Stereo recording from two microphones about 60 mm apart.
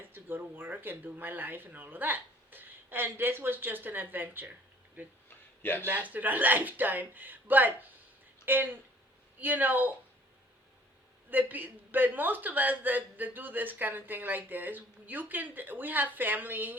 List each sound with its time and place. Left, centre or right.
0.1 s a man's voice: right
11.3 s a man's voice: right